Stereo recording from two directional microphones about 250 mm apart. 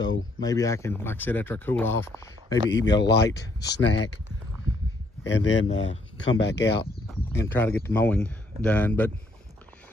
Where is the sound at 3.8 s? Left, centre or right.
Left.